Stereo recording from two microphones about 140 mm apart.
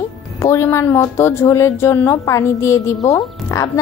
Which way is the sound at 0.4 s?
20° left (ahead or behind).